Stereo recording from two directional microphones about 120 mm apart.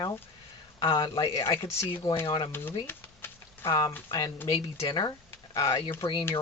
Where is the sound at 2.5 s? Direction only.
20° left (ahead or behind).